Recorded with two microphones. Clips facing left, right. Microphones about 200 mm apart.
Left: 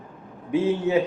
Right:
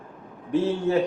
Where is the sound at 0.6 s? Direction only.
5° left (ahead or behind).